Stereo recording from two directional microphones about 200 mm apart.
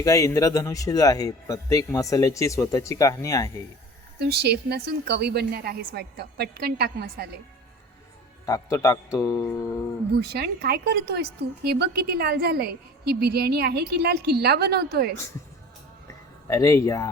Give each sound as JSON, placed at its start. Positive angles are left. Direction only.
{"t": 0.0, "sound": "speech", "side_deg": 15}
{"t": 4.2, "sound": "speech", "side_deg": -55}
{"t": 8.4, "sound": "speech", "side_deg": 15}
{"t": 10.2, "sound": "speech", "side_deg": -50}
{"t": 16.5, "sound": "speech", "side_deg": 15}